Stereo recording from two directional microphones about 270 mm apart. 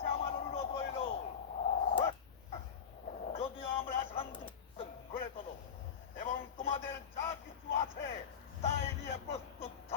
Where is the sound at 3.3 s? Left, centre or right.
Left.